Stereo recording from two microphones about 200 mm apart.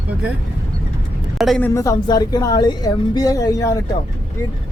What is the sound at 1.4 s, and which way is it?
Speech, centre (ahead or behind).